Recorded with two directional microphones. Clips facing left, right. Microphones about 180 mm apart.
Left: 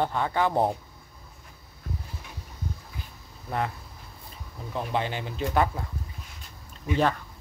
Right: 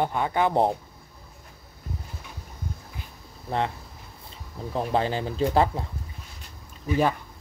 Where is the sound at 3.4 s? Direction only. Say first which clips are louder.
Right 3 dB; 25° right (ahead or behind).